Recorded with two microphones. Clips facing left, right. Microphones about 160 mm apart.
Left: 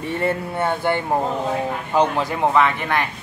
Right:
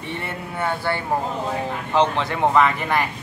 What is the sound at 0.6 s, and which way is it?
Speech, 20° left (ahead or behind).